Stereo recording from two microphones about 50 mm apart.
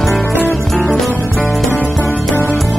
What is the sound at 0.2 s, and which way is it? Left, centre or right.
Music, left.